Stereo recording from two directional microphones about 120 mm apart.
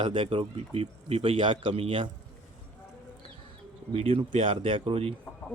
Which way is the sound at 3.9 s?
50° right (ahead or behind).